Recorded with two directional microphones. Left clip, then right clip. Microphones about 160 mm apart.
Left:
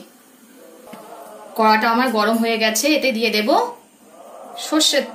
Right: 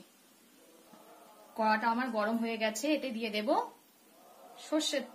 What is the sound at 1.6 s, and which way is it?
A woman's voice, 50° right (ahead or behind).